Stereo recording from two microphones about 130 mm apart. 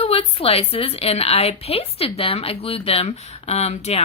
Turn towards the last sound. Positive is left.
turn(degrees=55)  # may be behind; listen again after turning